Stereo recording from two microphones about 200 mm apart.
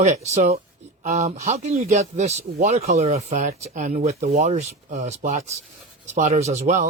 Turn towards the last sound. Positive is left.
turn(degrees=-35)  # may be behind; listen again after turning